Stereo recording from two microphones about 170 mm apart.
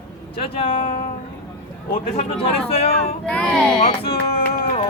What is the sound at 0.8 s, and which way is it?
Music, 50° left (ahead or behind).